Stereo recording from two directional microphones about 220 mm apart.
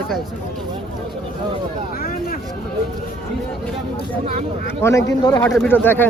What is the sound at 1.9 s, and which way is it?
Speech, 40° left (ahead or behind).